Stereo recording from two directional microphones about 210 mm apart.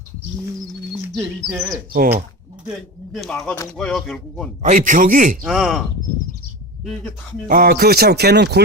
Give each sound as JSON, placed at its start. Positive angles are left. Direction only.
{"t": 1.0, "sound": "speech", "side_deg": 0}
{"t": 1.9, "sound": "speech", "side_deg": -45}
{"t": 2.6, "sound": "speech", "side_deg": 0}
{"t": 4.7, "sound": "a man's voice", "side_deg": -40}
{"t": 5.4, "sound": "speech", "side_deg": -5}
{"t": 7.4, "sound": "speech", "side_deg": -45}